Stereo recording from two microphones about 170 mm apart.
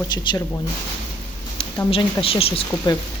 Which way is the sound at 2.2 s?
35° left (ahead or behind).